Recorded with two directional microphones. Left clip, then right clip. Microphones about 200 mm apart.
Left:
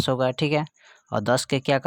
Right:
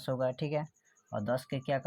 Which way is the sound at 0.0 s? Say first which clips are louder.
Left 10 dB; 45° left (ahead or behind).